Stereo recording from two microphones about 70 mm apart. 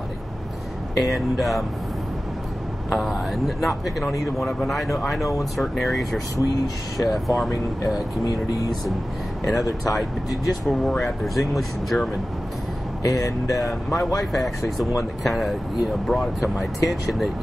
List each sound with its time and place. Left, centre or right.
0.9 s speech: centre
2.9 s speech: centre
9.4 s speech: centre
10.9 s speech: centre
11.2 s speech: centre
13.0 s speech: left
13.5 s speech: centre